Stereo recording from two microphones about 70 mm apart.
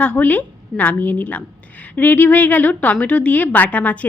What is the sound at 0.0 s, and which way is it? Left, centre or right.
A woman's voice, centre.